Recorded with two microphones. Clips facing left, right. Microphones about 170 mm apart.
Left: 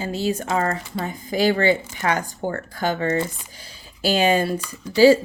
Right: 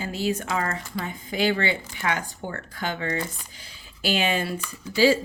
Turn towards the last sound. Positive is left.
turn(degrees=40)  # may be behind; listen again after turning